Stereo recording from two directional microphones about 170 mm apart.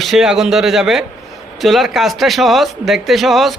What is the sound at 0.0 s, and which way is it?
A man's voice, centre (ahead or behind).